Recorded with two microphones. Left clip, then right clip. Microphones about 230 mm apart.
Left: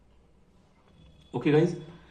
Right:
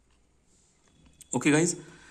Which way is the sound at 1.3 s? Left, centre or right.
Right.